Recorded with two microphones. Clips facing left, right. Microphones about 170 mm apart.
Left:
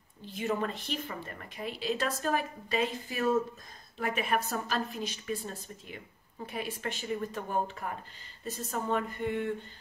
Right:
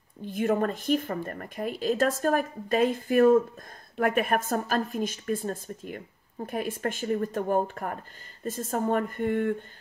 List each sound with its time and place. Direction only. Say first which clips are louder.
0.2 s a woman's voice: right 7 dB; 50° right (ahead or behind)